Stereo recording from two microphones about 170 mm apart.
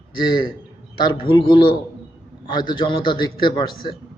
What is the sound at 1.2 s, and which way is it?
A man's voice, 30° left (ahead or behind).